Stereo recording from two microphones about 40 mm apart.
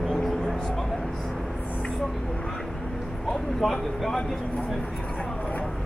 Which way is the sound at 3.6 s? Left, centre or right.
Centre.